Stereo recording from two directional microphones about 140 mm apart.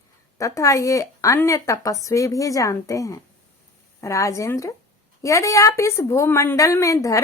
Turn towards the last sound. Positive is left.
turn(degrees=20)  # may be behind; listen again after turning